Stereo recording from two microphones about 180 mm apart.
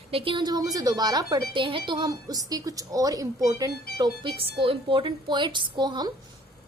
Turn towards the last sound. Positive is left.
turn(degrees=-25)  # may be behind; listen again after turning